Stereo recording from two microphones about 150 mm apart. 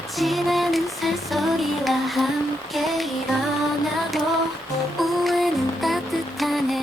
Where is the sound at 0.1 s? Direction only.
Centre (ahead or behind).